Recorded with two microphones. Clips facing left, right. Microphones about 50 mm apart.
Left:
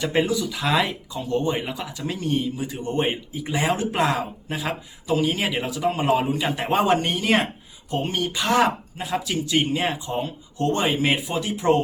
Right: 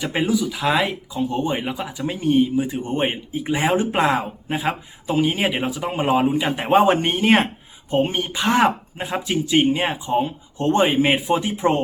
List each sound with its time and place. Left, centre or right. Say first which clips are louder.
0.0 s speech: right 1 dB; centre; by 11.8 s right